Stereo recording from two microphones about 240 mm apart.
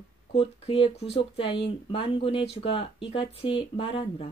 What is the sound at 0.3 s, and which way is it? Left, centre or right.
Speech, left.